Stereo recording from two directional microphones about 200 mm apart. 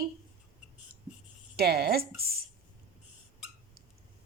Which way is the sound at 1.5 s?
50° right (ahead or behind).